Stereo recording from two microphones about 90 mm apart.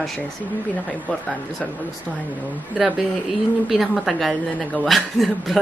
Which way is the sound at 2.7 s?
10° right (ahead or behind).